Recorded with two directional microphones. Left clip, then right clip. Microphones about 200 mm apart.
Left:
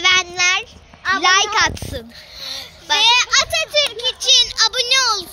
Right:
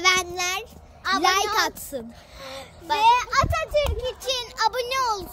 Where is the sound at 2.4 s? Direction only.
55° right (ahead or behind).